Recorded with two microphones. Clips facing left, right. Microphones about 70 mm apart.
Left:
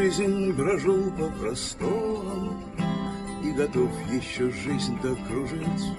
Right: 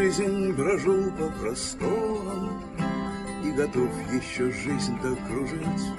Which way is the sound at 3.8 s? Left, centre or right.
Right.